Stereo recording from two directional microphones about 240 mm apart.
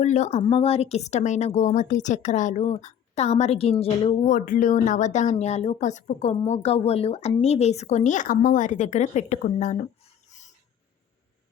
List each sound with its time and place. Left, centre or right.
0.0 s a woman's voice: left